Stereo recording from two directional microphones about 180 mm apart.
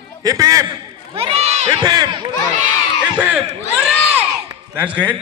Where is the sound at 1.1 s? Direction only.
35° right (ahead or behind).